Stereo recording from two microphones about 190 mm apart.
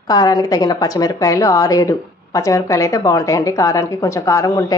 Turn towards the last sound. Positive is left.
turn(degrees=15)  # may be behind; listen again after turning